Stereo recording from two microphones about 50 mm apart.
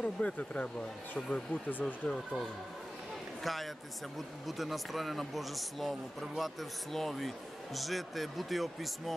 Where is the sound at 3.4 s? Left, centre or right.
Centre.